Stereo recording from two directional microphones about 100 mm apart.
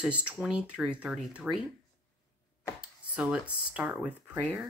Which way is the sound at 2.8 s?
10° right (ahead or behind).